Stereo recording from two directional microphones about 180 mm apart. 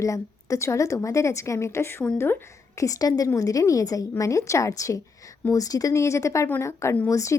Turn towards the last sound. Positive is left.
turn(degrees=15)  # may be behind; listen again after turning